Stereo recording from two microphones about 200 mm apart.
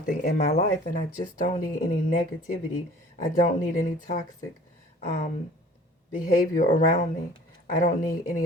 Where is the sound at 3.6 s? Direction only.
40° left (ahead or behind).